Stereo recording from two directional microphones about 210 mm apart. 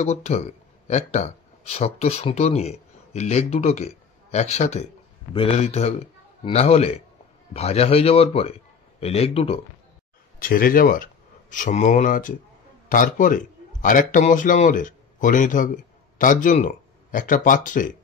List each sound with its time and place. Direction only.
0.0 s a man's voice: 30° left (ahead or behind)
10.4 s a man's voice: 40° left (ahead or behind)